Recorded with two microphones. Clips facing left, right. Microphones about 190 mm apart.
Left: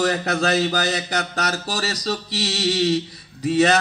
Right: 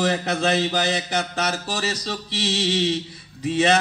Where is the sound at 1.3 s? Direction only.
40° left (ahead or behind).